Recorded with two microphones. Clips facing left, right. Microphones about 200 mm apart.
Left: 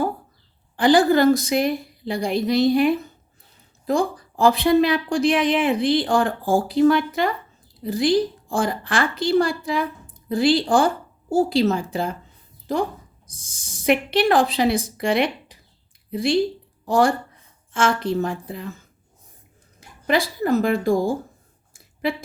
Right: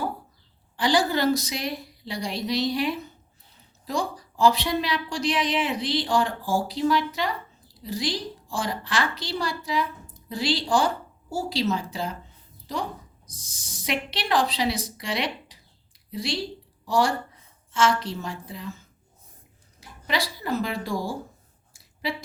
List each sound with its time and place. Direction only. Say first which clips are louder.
0.8 s a woman's voice: left 7 dB; 55° left (ahead or behind)
19.8 s speech: left 7 dB; 50° left (ahead or behind)